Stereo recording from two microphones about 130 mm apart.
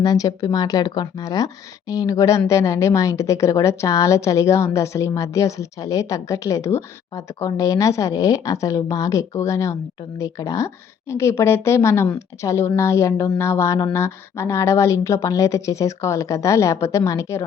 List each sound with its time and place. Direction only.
0.0 s speech: 30° left (ahead or behind)